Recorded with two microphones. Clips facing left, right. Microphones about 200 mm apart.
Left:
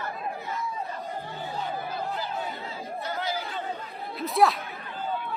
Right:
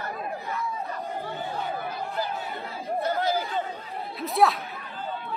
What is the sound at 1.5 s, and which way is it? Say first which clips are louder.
Chatter: left 3 dB; 55° right (ahead or behind).